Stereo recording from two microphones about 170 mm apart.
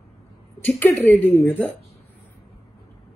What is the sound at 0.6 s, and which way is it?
Speech, 5° left (ahead or behind).